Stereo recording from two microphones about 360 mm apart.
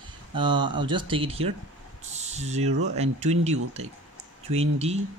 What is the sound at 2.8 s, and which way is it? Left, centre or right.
Speech, centre.